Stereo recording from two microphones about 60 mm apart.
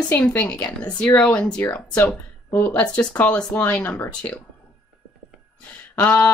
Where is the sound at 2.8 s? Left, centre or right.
Centre.